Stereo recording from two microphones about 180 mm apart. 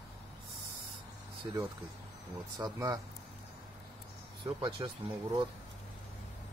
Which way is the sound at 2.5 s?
20° right (ahead or behind).